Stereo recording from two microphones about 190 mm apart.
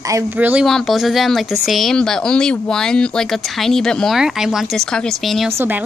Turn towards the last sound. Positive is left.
turn(degrees=-10)  # may be behind; listen again after turning